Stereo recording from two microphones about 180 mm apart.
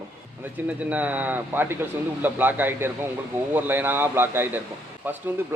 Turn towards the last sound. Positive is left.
turn(degrees=-10)  # may be behind; listen again after turning